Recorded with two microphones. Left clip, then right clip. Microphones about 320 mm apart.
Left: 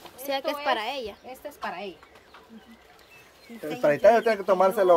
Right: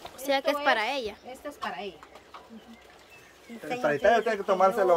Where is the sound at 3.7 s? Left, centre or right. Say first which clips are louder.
Left 4 dB; left.